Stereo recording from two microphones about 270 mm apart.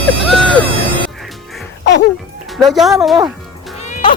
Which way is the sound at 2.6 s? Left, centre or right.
Centre.